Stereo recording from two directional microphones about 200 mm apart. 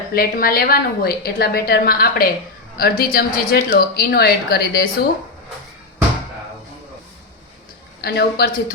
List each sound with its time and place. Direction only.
0.1 s a woman's voice: 50° left (ahead or behind)
8.0 s a woman's voice: 50° left (ahead or behind)